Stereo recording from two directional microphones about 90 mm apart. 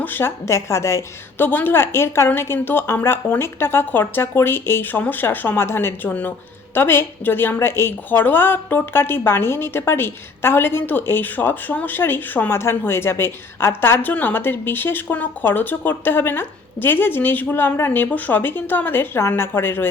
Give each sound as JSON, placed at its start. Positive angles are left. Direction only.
{"t": 0.0, "sound": "a woman's voice", "side_deg": 25}